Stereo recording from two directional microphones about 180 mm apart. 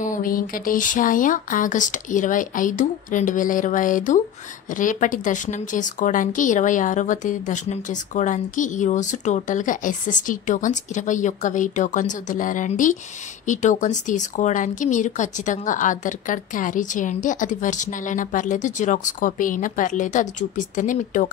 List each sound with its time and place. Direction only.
0.0 s a woman's voice: 50° left (ahead or behind)